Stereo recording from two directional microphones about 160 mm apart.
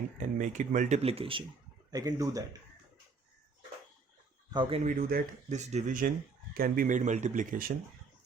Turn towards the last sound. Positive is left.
turn(degrees=-55)  # may be behind; listen again after turning